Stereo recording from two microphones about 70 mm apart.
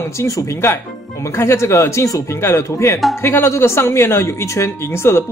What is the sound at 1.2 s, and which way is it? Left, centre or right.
Speech, left.